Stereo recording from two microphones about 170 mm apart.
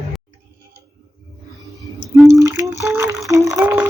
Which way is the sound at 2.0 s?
Centre (ahead or behind).